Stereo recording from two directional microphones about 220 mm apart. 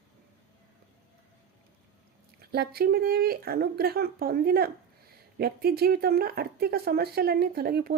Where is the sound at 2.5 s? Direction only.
45° right (ahead or behind).